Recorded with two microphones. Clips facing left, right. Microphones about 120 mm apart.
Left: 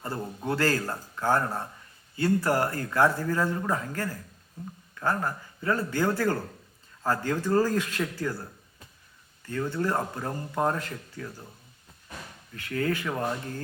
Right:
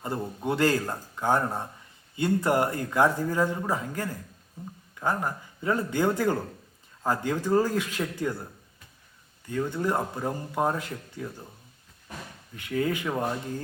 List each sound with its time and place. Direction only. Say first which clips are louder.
0.2 s a man's voice: right 2 dB; 10° right (ahead or behind)
9.5 s a man's voice: right 1 dB; 10° right (ahead or behind)
12.5 s a man's voice: right 1 dB; 15° right (ahead or behind)